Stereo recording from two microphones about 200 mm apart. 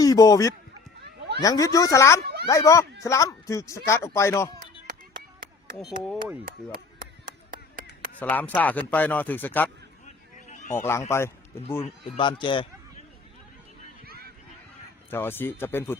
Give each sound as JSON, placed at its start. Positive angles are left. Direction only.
{"t": 0.0, "sound": "speech", "side_deg": 20}
{"t": 6.1, "sound": "speech", "side_deg": -5}
{"t": 6.4, "sound": "chop", "side_deg": -45}
{"t": 8.2, "sound": "speech", "side_deg": 10}
{"t": 10.5, "sound": "a sound", "side_deg": 40}
{"t": 11.1, "sound": "speech", "side_deg": 15}
{"t": 11.8, "sound": "speech", "side_deg": 25}
{"t": 14.0, "sound": "a sound", "side_deg": -50}
{"t": 15.1, "sound": "speech", "side_deg": 10}